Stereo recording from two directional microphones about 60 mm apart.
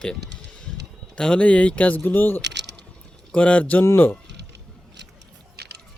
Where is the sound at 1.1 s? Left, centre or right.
Centre; by 2.4 s left.